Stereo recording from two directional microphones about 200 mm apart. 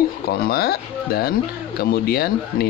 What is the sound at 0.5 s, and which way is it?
Speech, 50° left (ahead or behind).